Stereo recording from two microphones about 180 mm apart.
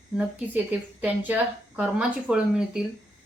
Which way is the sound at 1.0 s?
10° right (ahead or behind).